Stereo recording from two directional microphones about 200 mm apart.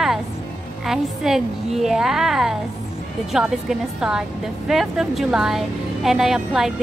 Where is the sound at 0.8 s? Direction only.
Centre (ahead or behind).